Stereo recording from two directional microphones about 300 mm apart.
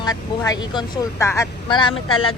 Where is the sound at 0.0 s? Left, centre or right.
Centre.